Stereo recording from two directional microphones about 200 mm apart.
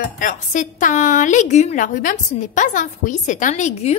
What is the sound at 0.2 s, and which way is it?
A woman's voice, 40° left (ahead or behind).